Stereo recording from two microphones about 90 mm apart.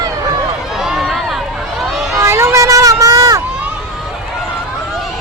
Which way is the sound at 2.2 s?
30° right (ahead or behind).